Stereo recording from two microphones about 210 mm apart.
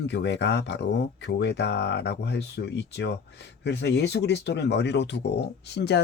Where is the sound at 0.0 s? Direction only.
55° left (ahead or behind).